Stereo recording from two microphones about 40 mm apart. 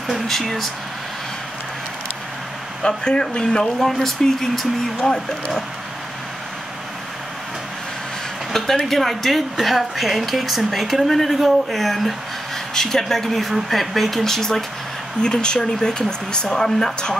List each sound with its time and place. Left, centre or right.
0.1 s speech: centre
2.8 s speech: left
3.8 s speech: centre
8.5 s speech: centre